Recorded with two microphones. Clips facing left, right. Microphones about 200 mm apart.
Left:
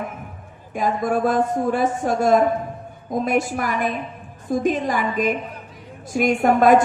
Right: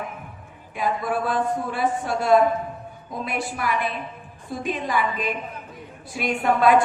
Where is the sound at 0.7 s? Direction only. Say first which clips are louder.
Left 4 dB; 45° left (ahead or behind).